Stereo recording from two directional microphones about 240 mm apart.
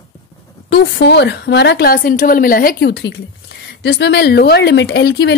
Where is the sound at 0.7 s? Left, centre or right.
Left.